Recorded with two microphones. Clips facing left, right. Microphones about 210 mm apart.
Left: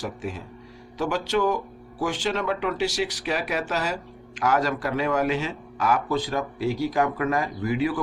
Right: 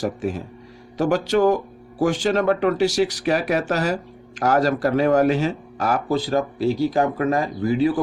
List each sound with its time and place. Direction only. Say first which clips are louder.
0.9 s a man's voice: right 6 dB; 45° right (ahead or behind)